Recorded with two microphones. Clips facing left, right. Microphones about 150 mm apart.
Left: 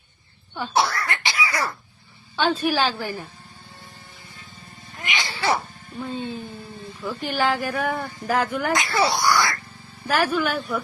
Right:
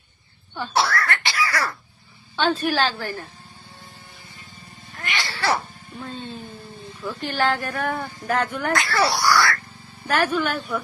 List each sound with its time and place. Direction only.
0.5 s cough: 15° left (ahead or behind)
2.3 s a woman's voice: 10° left (ahead or behind)
4.9 s cat: 15° left (ahead or behind)
5.5 s music: 5° left (ahead or behind)
7.0 s speech: 10° left (ahead or behind)
8.7 s a woman's voice: 20° left (ahead or behind)
9.0 s speech: centre (ahead or behind)
9.3 s speech: 20° left (ahead or behind)
10.1 s speech: centre (ahead or behind)